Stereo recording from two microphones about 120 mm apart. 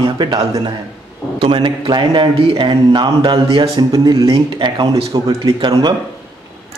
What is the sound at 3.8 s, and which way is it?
Speech, 35° right (ahead or behind).